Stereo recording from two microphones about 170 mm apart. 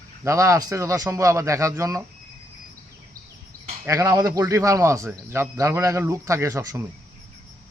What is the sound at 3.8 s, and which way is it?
Speech, 20° right (ahead or behind).